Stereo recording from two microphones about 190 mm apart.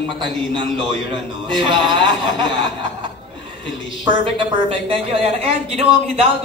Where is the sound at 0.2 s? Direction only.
25° right (ahead or behind).